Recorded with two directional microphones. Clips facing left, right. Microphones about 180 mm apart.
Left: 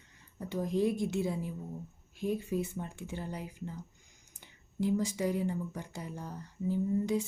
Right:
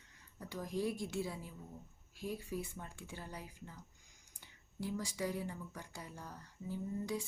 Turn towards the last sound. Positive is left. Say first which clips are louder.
# left 9 dB
turn(degrees=20)  # may be behind; listen again after turning